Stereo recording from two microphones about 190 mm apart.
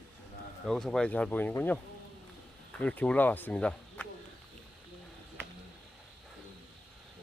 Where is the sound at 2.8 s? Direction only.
5° left (ahead or behind).